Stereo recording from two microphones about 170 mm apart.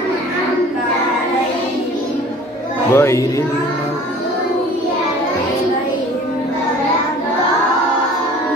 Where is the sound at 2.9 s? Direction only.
15° left (ahead or behind).